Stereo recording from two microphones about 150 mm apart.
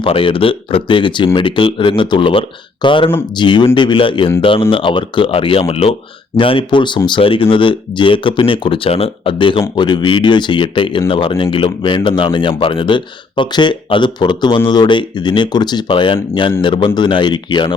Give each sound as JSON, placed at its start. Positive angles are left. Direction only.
{"t": 0.0, "sound": "speech", "side_deg": 35}